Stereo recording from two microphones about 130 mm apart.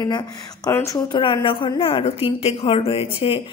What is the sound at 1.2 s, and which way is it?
A woman's voice, 40° left (ahead or behind).